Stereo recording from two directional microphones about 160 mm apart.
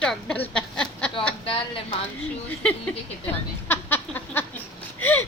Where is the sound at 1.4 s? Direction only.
35° left (ahead or behind).